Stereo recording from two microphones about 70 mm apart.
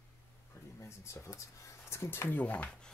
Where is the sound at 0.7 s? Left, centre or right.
Left.